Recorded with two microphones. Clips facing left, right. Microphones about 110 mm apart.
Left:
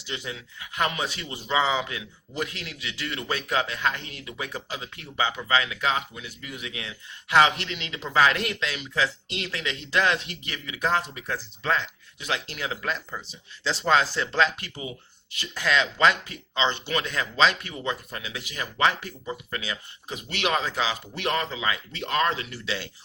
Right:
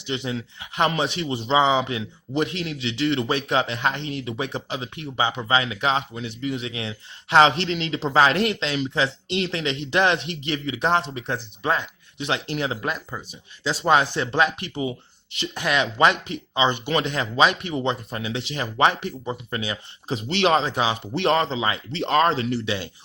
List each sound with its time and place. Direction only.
0.0 s speech: 20° right (ahead or behind)
22.6 s speech: 20° right (ahead or behind)